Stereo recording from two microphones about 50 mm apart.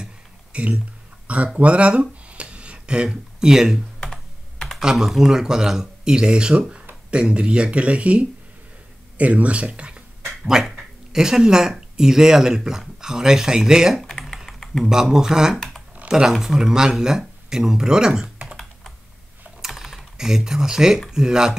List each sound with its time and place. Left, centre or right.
0.0 s a sound: right
1.6 s speech: right
4.0 s computer keyboard: centre
4.7 s speech: centre; by 10.3 s right
10.4 s speech: centre
14.0 s typing: centre
14.9 s speech: centre
19.6 s typing: centre
21.1 s speech: centre